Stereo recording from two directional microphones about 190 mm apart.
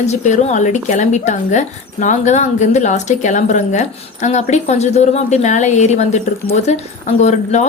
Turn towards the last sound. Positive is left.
turn(degrees=35)  # may be behind; listen again after turning